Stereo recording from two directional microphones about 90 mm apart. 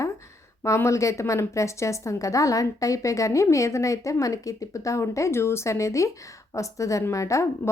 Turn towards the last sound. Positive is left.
turn(degrees=35)  # may be behind; listen again after turning